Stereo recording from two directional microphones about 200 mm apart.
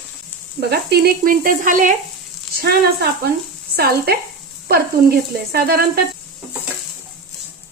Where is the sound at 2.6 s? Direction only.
50° right (ahead or behind).